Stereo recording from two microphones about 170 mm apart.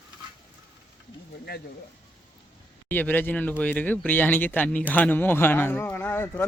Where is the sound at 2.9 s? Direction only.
10° left (ahead or behind).